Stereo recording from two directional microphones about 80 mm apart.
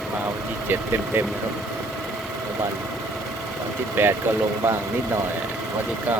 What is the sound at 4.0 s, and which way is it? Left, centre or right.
Speech, right.